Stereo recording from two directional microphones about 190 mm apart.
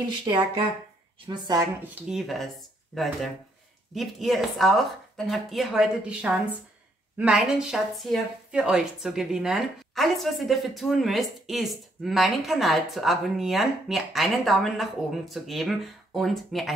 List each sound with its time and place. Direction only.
0.1 s speech: 25° right (ahead or behind)
1.8 s a woman's voice: 5° right (ahead or behind)